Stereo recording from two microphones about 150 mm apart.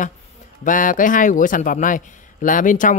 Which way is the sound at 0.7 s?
60° left (ahead or behind).